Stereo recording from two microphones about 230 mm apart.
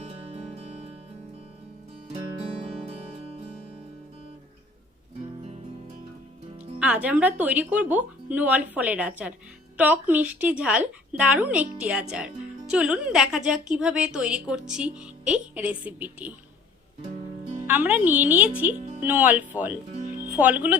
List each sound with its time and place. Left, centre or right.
0.0 s music: right
6.6 s a woman's voice: centre
17.7 s speech: centre